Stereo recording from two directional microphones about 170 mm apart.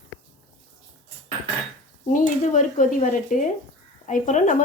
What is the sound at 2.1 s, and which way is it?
Speech, 50° left (ahead or behind).